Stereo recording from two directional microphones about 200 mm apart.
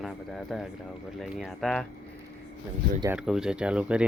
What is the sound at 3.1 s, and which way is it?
Speech, 5° right (ahead or behind).